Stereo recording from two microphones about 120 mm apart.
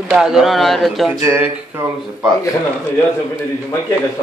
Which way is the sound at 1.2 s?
20° right (ahead or behind).